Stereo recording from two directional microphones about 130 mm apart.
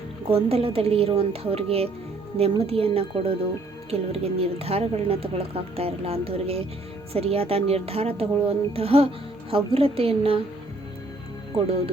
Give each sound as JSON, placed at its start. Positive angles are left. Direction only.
{"t": 0.3, "sound": "speech", "side_deg": -50}